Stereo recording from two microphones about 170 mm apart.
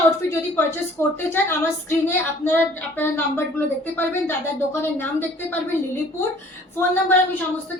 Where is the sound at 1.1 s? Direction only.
15° left (ahead or behind).